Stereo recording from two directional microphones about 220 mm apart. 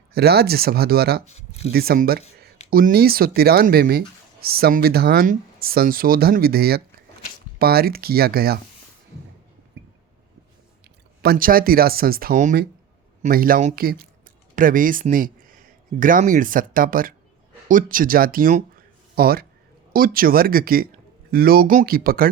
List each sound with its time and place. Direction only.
0.1 s speech: 45° right (ahead or behind)
1.2 s speech: 30° left (ahead or behind)
1.7 s speech: 45° right (ahead or behind)
11.2 s speech: 45° right (ahead or behind)